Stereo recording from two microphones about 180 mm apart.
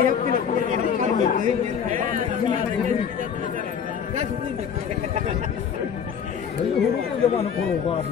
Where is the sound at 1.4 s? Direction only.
45° right (ahead or behind).